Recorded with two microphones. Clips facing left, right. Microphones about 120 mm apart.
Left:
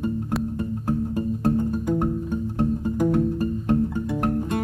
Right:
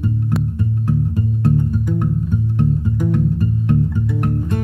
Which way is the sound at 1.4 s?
45° left (ahead or behind).